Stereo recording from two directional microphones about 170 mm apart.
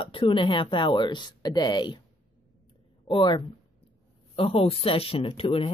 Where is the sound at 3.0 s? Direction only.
30° left (ahead or behind).